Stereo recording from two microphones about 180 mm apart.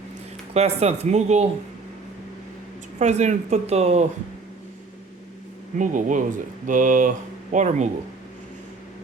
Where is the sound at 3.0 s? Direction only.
40° right (ahead or behind).